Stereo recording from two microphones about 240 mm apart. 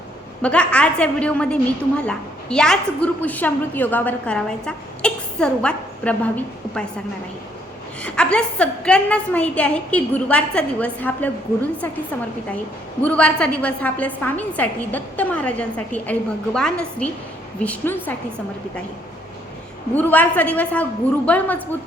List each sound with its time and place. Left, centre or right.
0.4 s a woman's voice: centre
8.0 s a woman's voice: centre
13.0 s a woman's voice: centre
20.0 s a woman's voice: centre